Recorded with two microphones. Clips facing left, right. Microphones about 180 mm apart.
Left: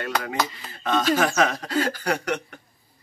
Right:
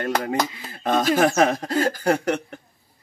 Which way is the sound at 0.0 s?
35° right (ahead or behind).